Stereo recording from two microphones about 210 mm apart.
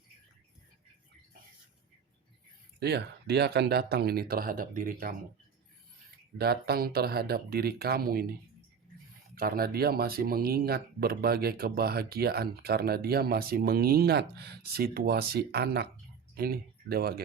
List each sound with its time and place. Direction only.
2.8 s speech: 50° right (ahead or behind)
6.3 s speech: 50° right (ahead or behind)